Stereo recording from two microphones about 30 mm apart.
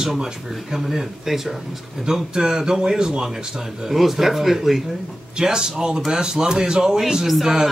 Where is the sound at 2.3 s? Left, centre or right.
Right.